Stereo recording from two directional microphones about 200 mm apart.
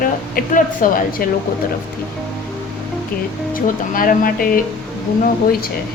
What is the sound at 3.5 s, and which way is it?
Speech, 45° left (ahead or behind).